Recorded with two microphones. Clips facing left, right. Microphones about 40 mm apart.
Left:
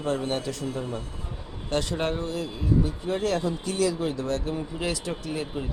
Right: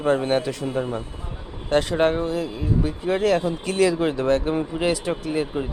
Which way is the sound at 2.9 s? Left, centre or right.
Right.